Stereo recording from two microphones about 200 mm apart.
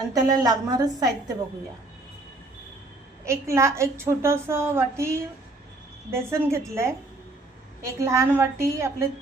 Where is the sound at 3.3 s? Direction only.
15° right (ahead or behind).